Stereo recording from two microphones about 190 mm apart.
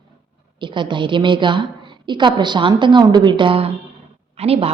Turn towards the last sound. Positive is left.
turn(degrees=-30)  # may be behind; listen again after turning